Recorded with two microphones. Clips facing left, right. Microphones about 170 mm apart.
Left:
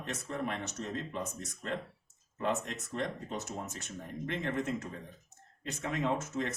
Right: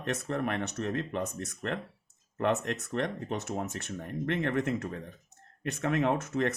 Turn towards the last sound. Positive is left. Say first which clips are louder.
# right 5 dB
turn(degrees=-60)  # may be behind; listen again after turning